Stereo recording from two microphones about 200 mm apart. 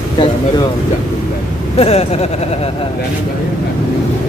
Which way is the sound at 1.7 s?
30° left (ahead or behind).